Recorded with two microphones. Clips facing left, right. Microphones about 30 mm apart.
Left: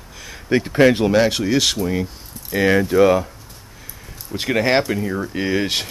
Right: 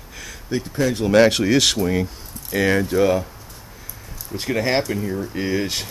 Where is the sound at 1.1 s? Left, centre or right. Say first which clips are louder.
Right 2 dB; centre.